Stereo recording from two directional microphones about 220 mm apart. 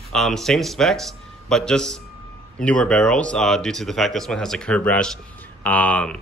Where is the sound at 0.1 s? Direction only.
Centre (ahead or behind).